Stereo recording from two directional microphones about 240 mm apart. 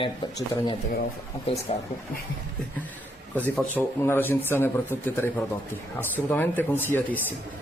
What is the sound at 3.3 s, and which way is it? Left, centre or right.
Speech, centre.